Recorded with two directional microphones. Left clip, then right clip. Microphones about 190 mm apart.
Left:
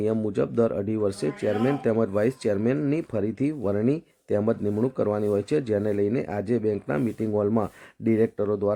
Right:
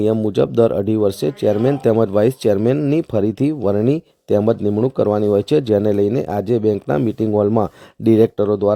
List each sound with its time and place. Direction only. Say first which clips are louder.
0.0 s speech: right 9 dB; 35° right (ahead or behind)